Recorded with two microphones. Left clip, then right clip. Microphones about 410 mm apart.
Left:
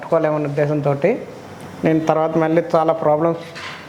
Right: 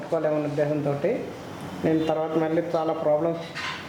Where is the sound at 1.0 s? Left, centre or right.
Left.